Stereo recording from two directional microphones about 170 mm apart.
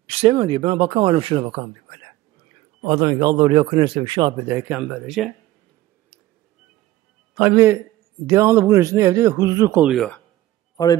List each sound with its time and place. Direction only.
0.0 s speech: 35° right (ahead or behind)
4.5 s a man's voice: 10° right (ahead or behind)
7.3 s a man's voice: 10° right (ahead or behind)
9.8 s speech: 5° left (ahead or behind)